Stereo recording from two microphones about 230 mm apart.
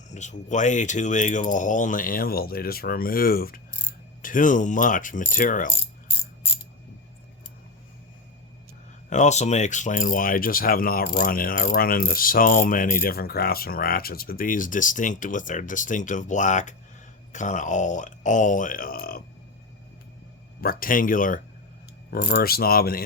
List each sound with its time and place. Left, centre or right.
0.1 s speech: left
9.0 s speech: left
20.6 s speech: left